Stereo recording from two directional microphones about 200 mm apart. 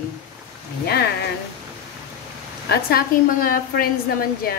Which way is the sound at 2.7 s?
50° left (ahead or behind).